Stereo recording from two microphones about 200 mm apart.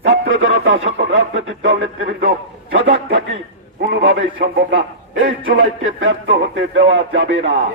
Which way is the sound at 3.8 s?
65° right (ahead or behind).